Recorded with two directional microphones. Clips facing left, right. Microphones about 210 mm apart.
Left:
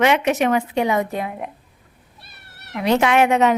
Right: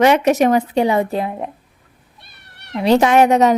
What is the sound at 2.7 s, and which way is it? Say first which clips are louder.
Speech: right 4 dB; 35° right (ahead or behind).